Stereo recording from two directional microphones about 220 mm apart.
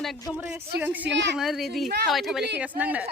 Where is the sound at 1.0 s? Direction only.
55° right (ahead or behind).